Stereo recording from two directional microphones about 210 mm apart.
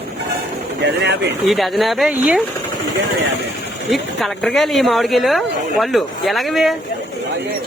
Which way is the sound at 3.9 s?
Centre (ahead or behind).